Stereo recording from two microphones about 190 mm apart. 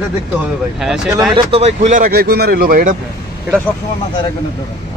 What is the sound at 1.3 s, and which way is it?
Speech, 30° right (ahead or behind).